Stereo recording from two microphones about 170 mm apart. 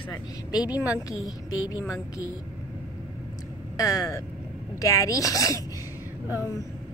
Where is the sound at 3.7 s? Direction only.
20° left (ahead or behind).